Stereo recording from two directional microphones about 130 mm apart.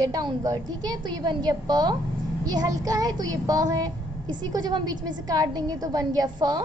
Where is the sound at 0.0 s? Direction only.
35° right (ahead or behind).